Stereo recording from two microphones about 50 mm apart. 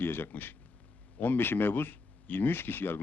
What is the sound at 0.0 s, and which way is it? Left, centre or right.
Speech, left.